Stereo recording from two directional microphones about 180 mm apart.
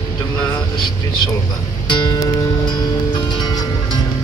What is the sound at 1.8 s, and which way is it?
Music, 20° left (ahead or behind).